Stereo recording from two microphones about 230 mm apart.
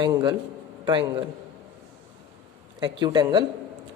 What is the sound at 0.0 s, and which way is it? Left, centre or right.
Speech, centre.